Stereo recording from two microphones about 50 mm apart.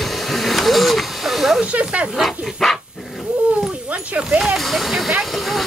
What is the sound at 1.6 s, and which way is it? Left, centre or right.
Snake, right.